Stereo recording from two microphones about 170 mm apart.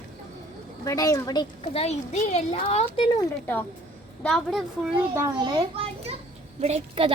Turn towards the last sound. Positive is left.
turn(degrees=-35)  # may be behind; listen again after turning